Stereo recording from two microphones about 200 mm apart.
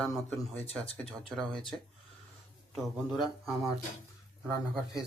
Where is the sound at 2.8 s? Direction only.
Centre (ahead or behind).